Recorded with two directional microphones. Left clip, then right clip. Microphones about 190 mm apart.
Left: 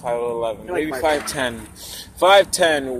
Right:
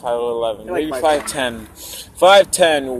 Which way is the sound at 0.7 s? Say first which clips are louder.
Right 2 dB; 20° left (ahead or behind).